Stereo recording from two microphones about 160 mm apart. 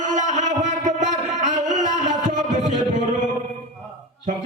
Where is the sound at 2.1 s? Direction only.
55° right (ahead or behind).